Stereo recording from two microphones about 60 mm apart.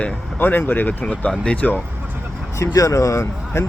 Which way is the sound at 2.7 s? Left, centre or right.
Left.